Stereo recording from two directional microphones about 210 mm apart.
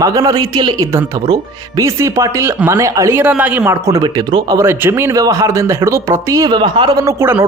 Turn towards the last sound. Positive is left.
turn(degrees=-10)  # may be behind; listen again after turning